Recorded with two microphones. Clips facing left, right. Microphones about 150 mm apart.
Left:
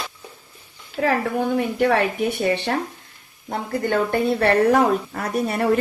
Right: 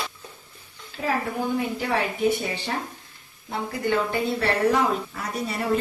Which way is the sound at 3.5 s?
50° left (ahead or behind).